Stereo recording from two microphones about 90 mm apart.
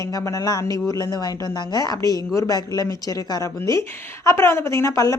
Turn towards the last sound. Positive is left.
turn(degrees=40)  # may be behind; listen again after turning